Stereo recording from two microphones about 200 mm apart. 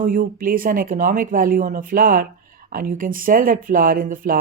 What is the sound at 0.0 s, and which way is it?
Speech, 40° right (ahead or behind).